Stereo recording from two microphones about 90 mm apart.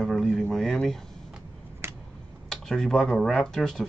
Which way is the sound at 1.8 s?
25° right (ahead or behind).